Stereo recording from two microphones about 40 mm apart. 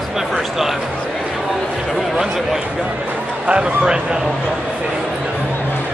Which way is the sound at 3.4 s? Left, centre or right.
Right.